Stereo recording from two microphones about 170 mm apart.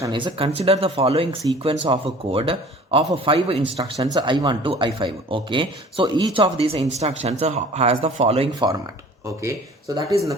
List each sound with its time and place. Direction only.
0.0 s speech: 30° right (ahead or behind)
8.5 s speech: 20° right (ahead or behind)